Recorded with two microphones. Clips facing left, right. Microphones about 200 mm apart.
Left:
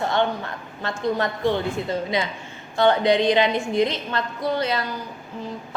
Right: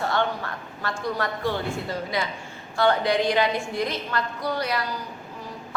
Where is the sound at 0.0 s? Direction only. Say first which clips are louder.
Left 3 dB; 20° left (ahead or behind).